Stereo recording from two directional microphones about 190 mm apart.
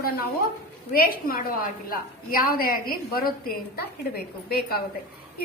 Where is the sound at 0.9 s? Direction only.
50° left (ahead or behind).